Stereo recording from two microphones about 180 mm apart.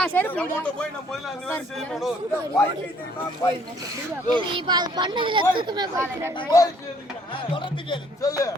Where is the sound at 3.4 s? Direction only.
10° left (ahead or behind).